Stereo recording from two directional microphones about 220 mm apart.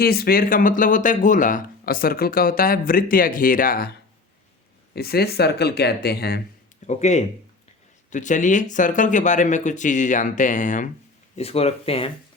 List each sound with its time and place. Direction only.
0.0 s speech: 45° left (ahead or behind)
4.9 s speech: 45° left (ahead or behind)
6.8 s speech: 30° left (ahead or behind)